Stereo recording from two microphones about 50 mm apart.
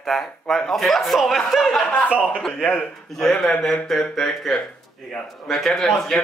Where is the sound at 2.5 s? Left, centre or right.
Centre.